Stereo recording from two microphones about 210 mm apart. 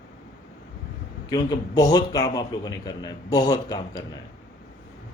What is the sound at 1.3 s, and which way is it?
A man's voice, 20° left (ahead or behind).